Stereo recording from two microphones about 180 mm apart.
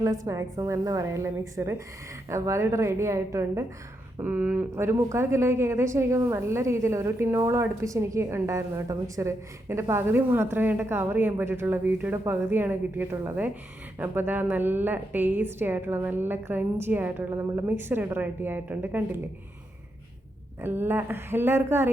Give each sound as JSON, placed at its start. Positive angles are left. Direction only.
{"t": 0.0, "sound": "a woman's voice", "side_deg": -15}
{"t": 20.6, "sound": "a woman's voice", "side_deg": -10}